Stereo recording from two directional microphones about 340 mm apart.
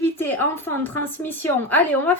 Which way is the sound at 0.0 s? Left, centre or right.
Centre.